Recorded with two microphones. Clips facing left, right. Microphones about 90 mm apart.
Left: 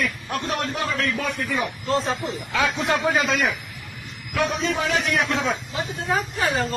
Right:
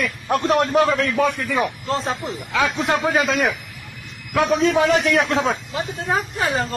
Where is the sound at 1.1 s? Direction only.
90° right.